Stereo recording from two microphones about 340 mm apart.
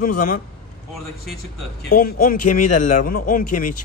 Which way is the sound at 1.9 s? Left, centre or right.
Left.